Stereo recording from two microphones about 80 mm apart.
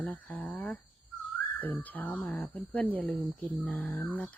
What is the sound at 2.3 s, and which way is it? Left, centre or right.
Speech, centre.